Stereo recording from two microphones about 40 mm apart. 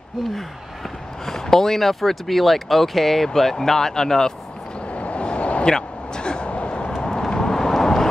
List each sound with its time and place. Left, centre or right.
1.2 s speech: centre
4.9 s vehicle: left
5.7 s vehicle: centre
6.9 s vehicle: centre